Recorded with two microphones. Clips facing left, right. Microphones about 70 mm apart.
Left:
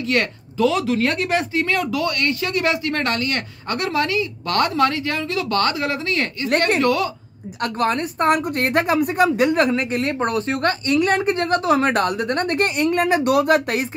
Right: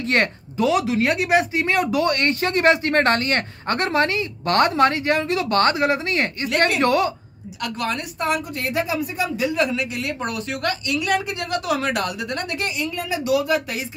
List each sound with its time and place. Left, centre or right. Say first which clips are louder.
0.0 s speech: even; right
7.6 s a woman's voice: left 5 dB; left